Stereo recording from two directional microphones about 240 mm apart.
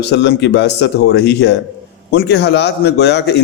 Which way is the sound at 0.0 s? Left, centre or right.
Left.